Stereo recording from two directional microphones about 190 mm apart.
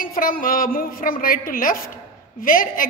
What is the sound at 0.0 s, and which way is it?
A woman's voice, 50° left (ahead or behind).